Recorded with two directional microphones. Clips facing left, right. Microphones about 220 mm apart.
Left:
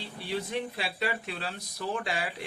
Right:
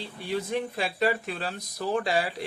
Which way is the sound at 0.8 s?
45° right (ahead or behind).